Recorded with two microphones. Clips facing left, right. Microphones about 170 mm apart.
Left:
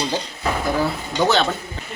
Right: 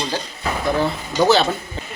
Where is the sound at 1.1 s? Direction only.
5° right (ahead or behind).